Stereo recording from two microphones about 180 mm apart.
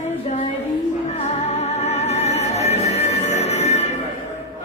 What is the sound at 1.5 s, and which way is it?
Music, 40° left (ahead or behind).